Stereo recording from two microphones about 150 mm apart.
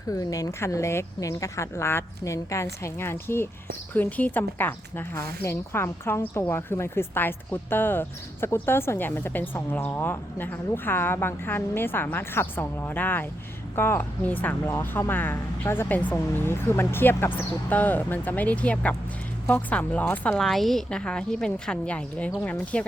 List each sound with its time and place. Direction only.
0.1 s a woman's voice: 20° left (ahead or behind)